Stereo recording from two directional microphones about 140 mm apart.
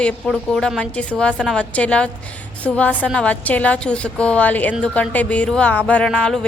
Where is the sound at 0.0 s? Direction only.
5° left (ahead or behind).